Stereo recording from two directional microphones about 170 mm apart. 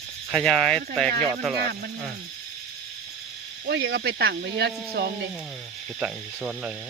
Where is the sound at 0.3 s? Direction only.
Centre (ahead or behind).